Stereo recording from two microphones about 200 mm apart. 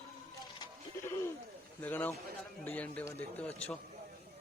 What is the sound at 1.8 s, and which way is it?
Speech, 10° left (ahead or behind).